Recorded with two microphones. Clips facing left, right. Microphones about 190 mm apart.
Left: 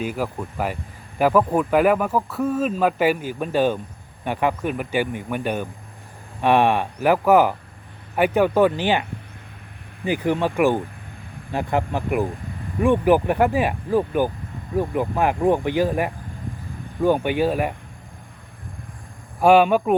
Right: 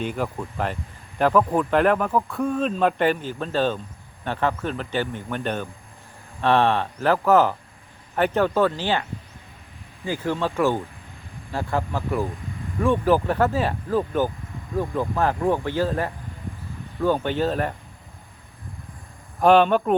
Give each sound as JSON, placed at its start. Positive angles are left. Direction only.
{"t": 0.0, "sound": "speech", "side_deg": 5}
{"t": 19.4, "sound": "speech", "side_deg": 10}